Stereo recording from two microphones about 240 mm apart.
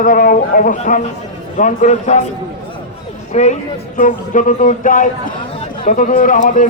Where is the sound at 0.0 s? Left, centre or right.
Left.